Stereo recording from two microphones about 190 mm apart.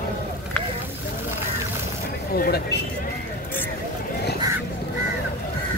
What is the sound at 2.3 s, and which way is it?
Speech, 55° left (ahead or behind).